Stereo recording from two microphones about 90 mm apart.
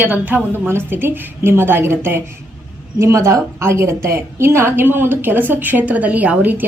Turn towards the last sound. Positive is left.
turn(degrees=-20)  # may be behind; listen again after turning